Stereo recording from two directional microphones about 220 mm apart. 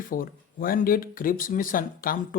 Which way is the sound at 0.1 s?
40° left (ahead or behind).